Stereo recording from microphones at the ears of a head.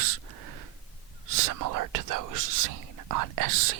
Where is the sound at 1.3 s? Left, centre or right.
Right.